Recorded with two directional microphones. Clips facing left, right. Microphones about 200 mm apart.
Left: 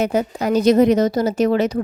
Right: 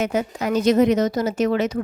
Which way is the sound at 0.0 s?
35° left (ahead or behind).